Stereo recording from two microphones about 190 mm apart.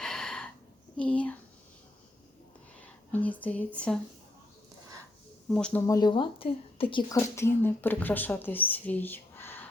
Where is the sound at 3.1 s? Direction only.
10° left (ahead or behind).